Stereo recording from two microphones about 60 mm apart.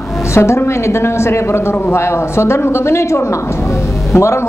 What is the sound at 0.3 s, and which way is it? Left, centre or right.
A man's voice, left.